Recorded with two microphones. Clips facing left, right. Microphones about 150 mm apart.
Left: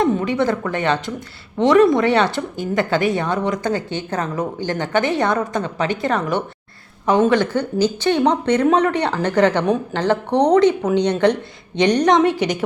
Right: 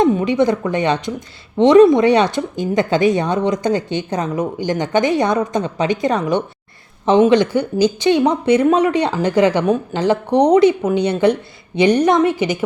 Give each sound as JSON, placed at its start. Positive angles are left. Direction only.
{"t": 0.0, "sound": "a woman's voice", "side_deg": -15}